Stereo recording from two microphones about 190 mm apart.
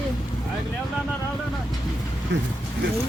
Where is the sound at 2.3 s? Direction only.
75° right (ahead or behind).